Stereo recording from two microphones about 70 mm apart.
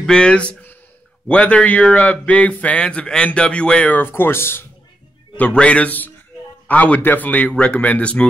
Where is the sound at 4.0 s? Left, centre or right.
Left.